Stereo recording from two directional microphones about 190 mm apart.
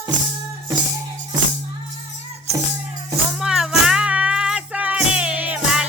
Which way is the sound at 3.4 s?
Centre (ahead or behind).